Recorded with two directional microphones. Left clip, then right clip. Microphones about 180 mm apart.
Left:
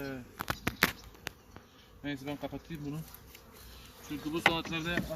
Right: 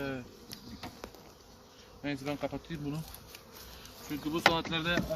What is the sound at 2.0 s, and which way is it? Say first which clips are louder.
Speech: right 3 dB; 5° right (ahead or behind).